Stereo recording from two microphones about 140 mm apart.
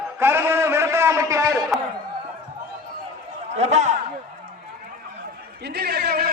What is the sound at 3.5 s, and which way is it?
Speech, 55° right (ahead or behind).